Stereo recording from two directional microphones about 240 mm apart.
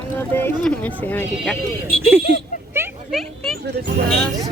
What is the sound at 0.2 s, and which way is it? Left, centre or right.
Speech, centre.